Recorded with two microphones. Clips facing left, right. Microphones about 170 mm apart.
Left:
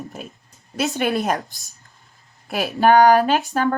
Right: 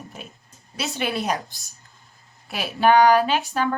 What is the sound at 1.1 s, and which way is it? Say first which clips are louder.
Speech: left 4 dB; 45° left (ahead or behind).